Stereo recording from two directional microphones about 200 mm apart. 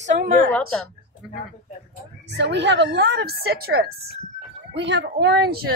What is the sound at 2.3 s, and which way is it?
A woman's voice, 60° right (ahead or behind).